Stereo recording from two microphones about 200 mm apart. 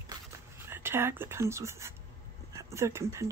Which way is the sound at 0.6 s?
10° right (ahead or behind).